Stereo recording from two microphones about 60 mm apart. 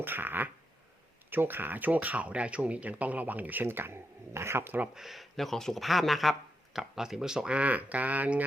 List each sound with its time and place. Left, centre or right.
0.0 s fart: right
1.3 s speech: right
4.9 s speech: centre; by 8.4 s right